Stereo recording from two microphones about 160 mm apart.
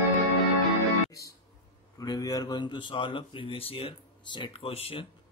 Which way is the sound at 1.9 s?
25° left (ahead or behind).